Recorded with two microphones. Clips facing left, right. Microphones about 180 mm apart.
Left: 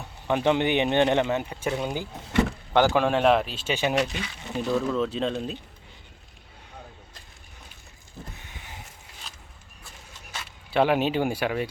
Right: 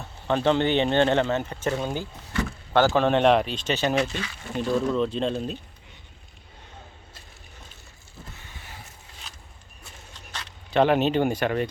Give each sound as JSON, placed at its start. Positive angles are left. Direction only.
{"t": 0.0, "sound": "speech", "side_deg": 15}
{"t": 4.5, "sound": "speech", "side_deg": 0}
{"t": 8.4, "sound": "boat", "side_deg": 20}
{"t": 10.2, "sound": "speech", "side_deg": 10}